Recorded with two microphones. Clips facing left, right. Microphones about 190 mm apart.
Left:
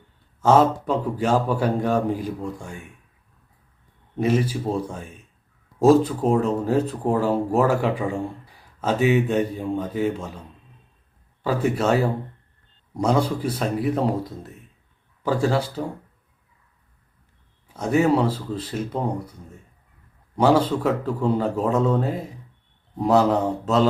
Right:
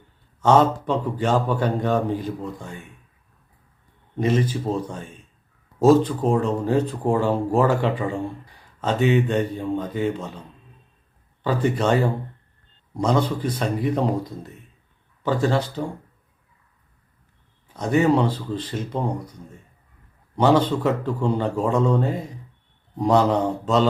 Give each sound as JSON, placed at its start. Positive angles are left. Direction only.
{"t": 0.4, "sound": "speech", "side_deg": 5}
{"t": 4.2, "sound": "speech", "side_deg": 5}
{"t": 11.4, "sound": "speech", "side_deg": 5}
{"t": 17.7, "sound": "speech", "side_deg": 5}